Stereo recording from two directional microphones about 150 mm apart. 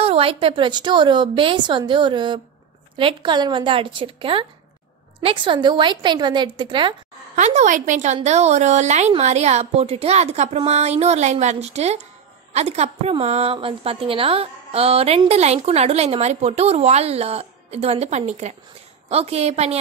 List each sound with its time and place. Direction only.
0.0 s speech: 40° right (ahead or behind)
7.3 s a woman's voice: 50° right (ahead or behind)